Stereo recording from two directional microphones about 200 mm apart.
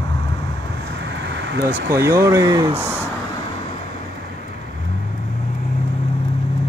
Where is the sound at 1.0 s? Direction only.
65° right (ahead or behind).